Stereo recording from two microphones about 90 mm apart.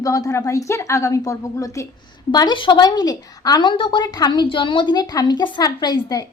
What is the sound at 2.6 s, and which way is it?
A woman's voice, 65° left (ahead or behind).